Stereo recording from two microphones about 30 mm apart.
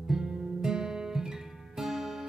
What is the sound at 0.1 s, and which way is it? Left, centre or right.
Music, centre.